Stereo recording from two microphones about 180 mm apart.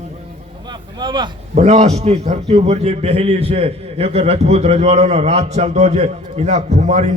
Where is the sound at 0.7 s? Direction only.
25° right (ahead or behind).